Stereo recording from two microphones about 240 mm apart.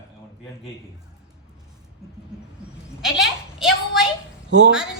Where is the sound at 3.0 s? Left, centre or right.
Centre.